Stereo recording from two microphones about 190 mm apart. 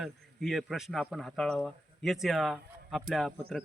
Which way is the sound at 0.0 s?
Centre (ahead or behind).